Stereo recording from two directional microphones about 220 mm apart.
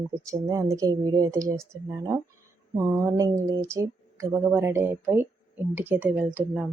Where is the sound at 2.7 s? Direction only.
10° right (ahead or behind).